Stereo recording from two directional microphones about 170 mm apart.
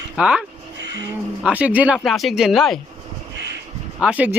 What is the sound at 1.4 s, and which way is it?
Speech, 10° right (ahead or behind).